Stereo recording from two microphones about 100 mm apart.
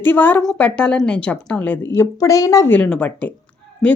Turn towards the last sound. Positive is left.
turn(degrees=10)  # may be behind; listen again after turning